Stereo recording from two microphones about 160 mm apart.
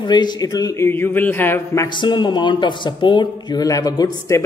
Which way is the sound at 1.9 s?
30° left (ahead or behind).